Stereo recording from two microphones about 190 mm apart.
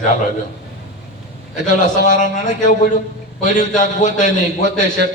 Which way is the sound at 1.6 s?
45° left (ahead or behind).